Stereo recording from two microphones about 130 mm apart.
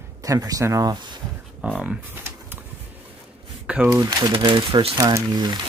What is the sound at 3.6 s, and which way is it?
Speech, 10° right (ahead or behind).